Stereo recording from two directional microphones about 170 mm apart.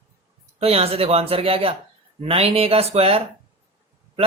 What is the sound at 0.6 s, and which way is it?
Speech, 35° right (ahead or behind).